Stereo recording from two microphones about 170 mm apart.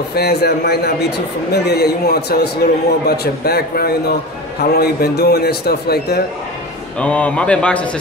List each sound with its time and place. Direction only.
0.1 s a man's voice: 70° left (ahead or behind)
7.0 s speech: 5° left (ahead or behind)